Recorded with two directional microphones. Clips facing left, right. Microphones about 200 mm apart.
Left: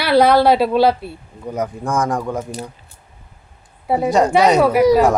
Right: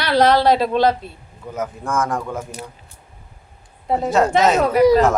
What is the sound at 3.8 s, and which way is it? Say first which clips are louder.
A woman's voice: left 2 dB; 10° left (ahead or behind).